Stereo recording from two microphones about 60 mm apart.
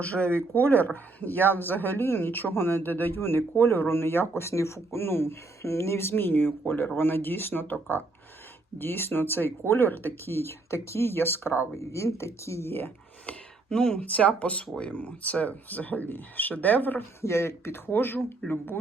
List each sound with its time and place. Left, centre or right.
0.0 s speech: left
11.8 s speech: left
13.2 s a sound: centre
14.0 s speech: left
17.2 s speech: left